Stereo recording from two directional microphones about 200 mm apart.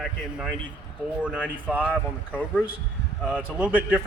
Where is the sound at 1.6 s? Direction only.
5° right (ahead or behind).